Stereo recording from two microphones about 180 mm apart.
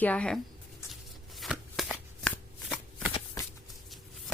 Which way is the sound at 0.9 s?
Centre (ahead or behind).